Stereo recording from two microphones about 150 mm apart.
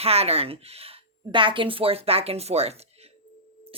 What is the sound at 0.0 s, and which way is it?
A woman's voice, 45° right (ahead or behind).